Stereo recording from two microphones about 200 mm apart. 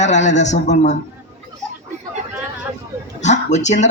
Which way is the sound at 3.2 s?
35° left (ahead or behind).